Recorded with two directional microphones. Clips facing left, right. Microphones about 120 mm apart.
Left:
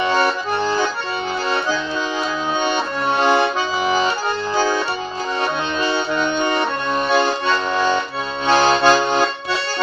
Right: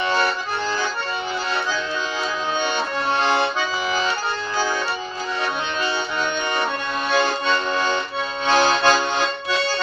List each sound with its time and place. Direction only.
0.0 s accordion: 20° left (ahead or behind)
3.2 s accordion: 15° left (ahead or behind)
8.4 s accordion: 15° left (ahead or behind)